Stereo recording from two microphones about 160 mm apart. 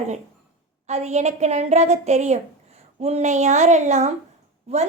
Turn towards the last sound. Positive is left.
turn(degrees=-40)  # may be behind; listen again after turning